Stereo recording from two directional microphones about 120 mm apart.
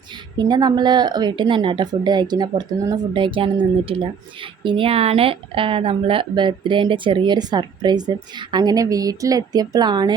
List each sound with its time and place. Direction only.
0.3 s speech: 35° right (ahead or behind)